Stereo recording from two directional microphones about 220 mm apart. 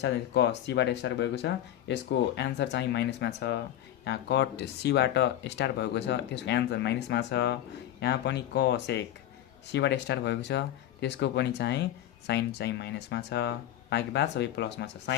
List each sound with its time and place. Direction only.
0.0 s speech: 50° left (ahead or behind)